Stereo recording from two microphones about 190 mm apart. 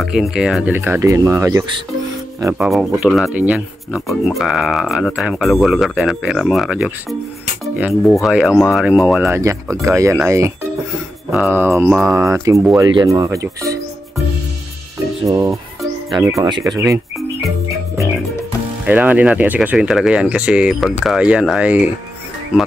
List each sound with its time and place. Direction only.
0.0 s speech: centre (ahead or behind)
2.6 s speech: 5° right (ahead or behind)
15.2 s speech: 20° right (ahead or behind)
18.9 s speech: 10° right (ahead or behind)